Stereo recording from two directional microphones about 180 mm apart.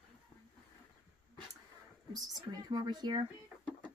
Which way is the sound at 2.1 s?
20° right (ahead or behind).